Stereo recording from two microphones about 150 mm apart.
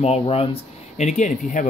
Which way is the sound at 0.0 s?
40° left (ahead or behind).